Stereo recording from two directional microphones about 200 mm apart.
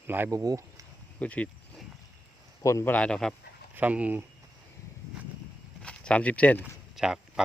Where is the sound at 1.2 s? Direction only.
5° left (ahead or behind).